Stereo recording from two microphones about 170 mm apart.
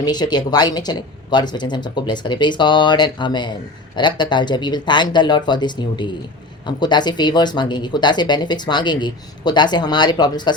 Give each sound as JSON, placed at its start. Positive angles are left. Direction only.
{"t": 0.0, "sound": "speech", "side_deg": 25}